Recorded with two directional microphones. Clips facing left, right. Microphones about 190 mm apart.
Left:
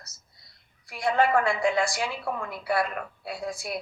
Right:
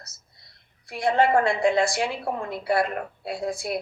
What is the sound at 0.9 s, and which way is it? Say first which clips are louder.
A woman's voice: right 3 dB; 25° right (ahead or behind).